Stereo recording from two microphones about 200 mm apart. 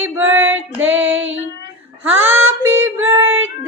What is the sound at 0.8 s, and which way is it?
Female singing, 75° right (ahead or behind).